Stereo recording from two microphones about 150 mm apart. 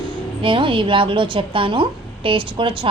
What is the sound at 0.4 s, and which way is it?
A woman's voice, 35° right (ahead or behind).